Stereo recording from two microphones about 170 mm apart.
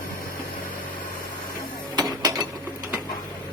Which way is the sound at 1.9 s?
25° right (ahead or behind).